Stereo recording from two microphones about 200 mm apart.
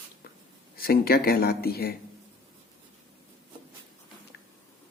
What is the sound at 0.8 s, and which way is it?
Speech, 50° left (ahead or behind).